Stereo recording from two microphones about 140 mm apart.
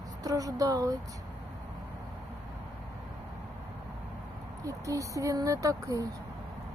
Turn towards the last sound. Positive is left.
turn(degrees=-25)  # may be behind; listen again after turning